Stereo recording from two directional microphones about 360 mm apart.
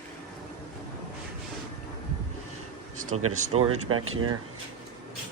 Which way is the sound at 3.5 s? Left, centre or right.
Right.